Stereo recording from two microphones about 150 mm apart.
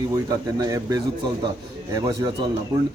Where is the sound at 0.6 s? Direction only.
25° right (ahead or behind).